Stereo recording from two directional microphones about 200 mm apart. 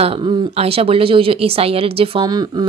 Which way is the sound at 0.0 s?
30° right (ahead or behind).